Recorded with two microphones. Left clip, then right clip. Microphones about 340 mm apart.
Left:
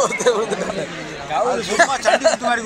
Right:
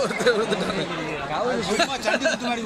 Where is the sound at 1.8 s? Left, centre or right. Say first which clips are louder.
Left 11 dB; left.